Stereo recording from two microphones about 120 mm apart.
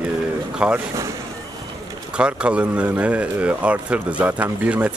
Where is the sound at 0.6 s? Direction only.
10° right (ahead or behind).